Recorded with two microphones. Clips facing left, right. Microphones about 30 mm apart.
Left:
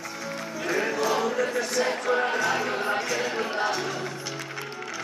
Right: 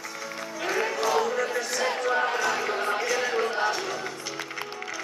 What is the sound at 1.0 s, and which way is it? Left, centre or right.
Speech, centre.